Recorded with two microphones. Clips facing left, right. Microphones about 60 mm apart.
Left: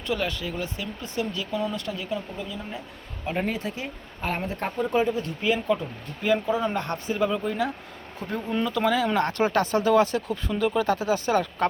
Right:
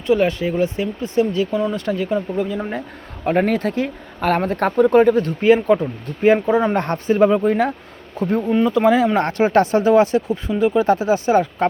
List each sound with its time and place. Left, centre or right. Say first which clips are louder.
0.1 s speech: right 11 dB; right
2.3 s speech: right 12 dB; right
8.6 s speech: right 8 dB; right